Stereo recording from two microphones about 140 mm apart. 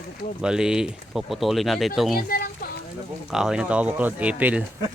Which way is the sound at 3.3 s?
5° right (ahead or behind).